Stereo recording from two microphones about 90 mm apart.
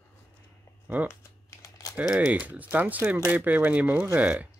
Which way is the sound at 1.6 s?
40° left (ahead or behind).